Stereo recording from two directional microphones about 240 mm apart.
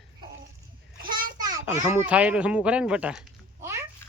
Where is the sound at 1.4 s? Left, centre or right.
Centre.